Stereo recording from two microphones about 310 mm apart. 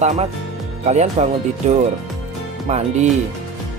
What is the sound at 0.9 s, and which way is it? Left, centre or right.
Speech, right.